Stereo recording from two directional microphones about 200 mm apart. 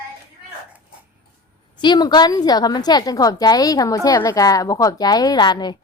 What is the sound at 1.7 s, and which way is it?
A woman's voice, 20° left (ahead or behind).